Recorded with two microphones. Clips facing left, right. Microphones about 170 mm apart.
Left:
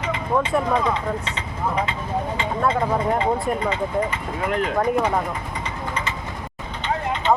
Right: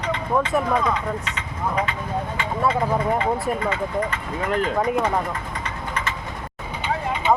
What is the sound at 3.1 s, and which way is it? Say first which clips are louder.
Speech: left 1 dB; 20° left (ahead or behind).